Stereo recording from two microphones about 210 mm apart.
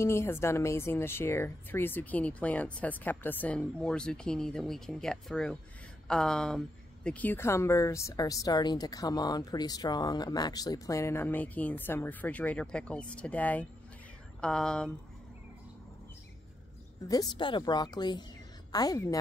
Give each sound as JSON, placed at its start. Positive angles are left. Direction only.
{"t": 0.0, "sound": "a woman's voice", "side_deg": 15}
{"t": 17.1, "sound": "a woman's voice", "side_deg": 20}